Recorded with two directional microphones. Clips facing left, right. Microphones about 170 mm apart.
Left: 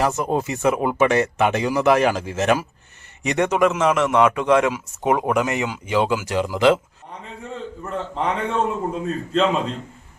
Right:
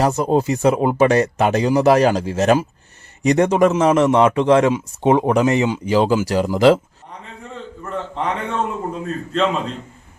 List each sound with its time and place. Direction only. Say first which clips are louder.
0.0 s speech: right 4 dB; 35° right (ahead or behind)
7.5 s a man's voice: right 1 dB; centre (ahead or behind)